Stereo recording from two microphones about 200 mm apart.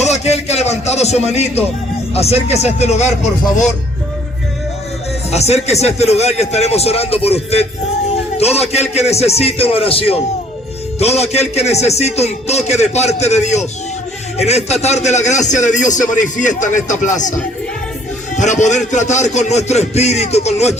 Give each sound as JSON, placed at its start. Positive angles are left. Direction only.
{"t": 0.0, "sound": "a man's voice", "side_deg": 35}
{"t": 5.3, "sound": "a man's voice", "side_deg": 30}
{"t": 8.4, "sound": "a man's voice", "side_deg": 30}